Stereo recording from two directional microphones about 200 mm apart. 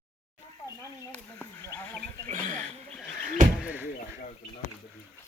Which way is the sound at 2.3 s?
40° right (ahead or behind).